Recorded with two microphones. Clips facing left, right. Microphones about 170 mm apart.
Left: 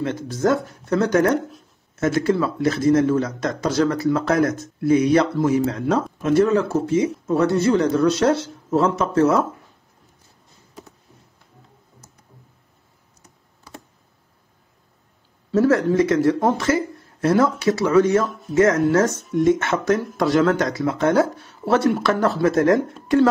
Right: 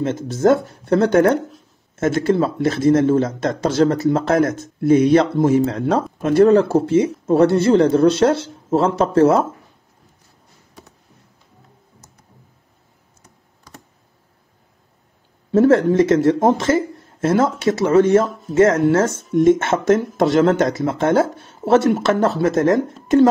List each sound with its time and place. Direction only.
0.0 s speech: 25° right (ahead or behind)
15.5 s speech: 25° right (ahead or behind)
16.5 s a sound: 25° right (ahead or behind)
17.4 s speech: 25° right (ahead or behind)